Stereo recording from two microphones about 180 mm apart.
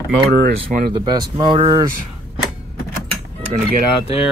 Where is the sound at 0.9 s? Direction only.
25° right (ahead or behind).